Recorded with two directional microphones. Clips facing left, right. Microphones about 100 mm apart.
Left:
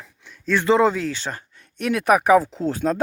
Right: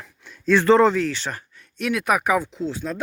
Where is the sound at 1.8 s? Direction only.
30° left (ahead or behind).